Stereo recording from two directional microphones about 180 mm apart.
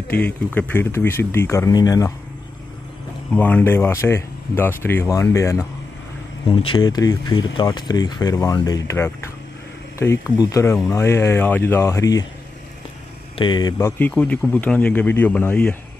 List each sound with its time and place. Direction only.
0.1 s speech: 10° left (ahead or behind)
3.3 s speech: 10° left (ahead or behind)
6.5 s speech: 30° left (ahead or behind)
13.4 s speech: 25° left (ahead or behind); by 15.7 s 5° left (ahead or behind)